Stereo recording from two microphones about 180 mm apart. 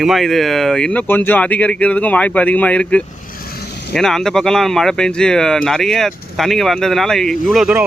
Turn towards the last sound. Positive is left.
turn(degrees=-5)  # may be behind; listen again after turning